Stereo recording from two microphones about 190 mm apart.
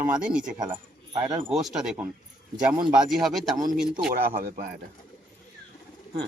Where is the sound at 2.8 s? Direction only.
25° right (ahead or behind).